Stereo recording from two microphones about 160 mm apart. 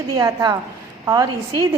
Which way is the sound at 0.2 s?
20° right (ahead or behind).